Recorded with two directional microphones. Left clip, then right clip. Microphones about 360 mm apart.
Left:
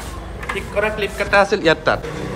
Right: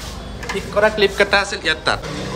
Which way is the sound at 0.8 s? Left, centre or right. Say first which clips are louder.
Right 6 dB; centre.